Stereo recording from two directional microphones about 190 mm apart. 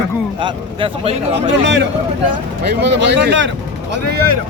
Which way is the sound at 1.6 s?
70° right (ahead or behind).